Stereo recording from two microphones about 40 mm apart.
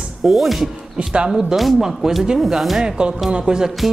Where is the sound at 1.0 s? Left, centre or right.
Right.